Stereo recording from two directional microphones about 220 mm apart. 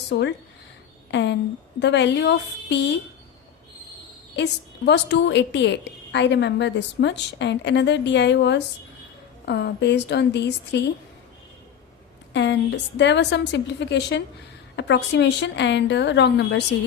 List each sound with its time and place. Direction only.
0.1 s a woman's voice: 50° left (ahead or behind)
4.9 s a woman's voice: 55° left (ahead or behind)
12.3 s a woman's voice: 55° left (ahead or behind)